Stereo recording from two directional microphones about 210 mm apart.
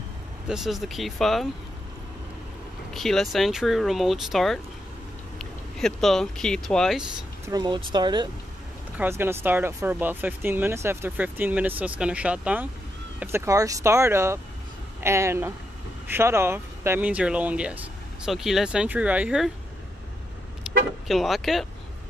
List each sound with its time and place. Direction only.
0.5 s speech: centre (ahead or behind)
2.9 s speech: centre (ahead or behind)
7.4 s speech: 20° right (ahead or behind)
8.9 s speech: 10° right (ahead or behind)
21.1 s speech: centre (ahead or behind)